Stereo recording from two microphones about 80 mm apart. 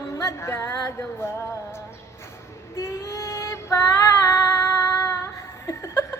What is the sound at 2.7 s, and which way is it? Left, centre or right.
Female singing, left.